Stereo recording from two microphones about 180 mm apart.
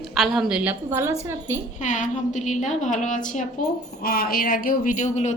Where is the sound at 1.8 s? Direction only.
45° left (ahead or behind).